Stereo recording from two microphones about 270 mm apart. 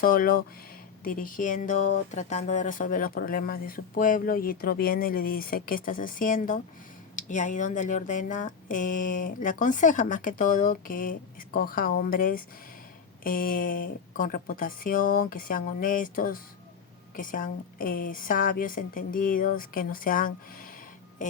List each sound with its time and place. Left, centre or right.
0.0 s speech: left